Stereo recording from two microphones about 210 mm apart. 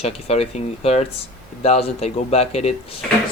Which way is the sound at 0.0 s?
30° left (ahead or behind).